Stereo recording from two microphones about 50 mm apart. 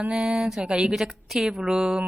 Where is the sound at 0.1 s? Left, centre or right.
Centre.